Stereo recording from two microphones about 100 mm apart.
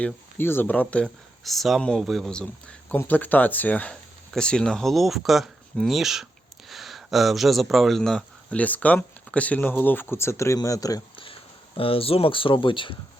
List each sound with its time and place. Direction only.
0.0 s speech: 20° left (ahead or behind)
1.0 s speech: centre (ahead or behind); by 11.0 s 35° left (ahead or behind)
11.8 s speech: 70° left (ahead or behind)